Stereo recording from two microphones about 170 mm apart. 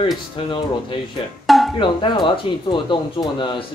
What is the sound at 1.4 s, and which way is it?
Music, centre (ahead or behind).